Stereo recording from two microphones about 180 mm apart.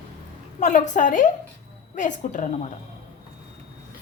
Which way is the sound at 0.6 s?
40° left (ahead or behind).